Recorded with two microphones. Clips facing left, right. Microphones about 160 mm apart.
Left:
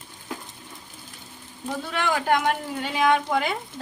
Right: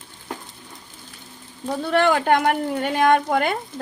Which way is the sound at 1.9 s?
65° right (ahead or behind).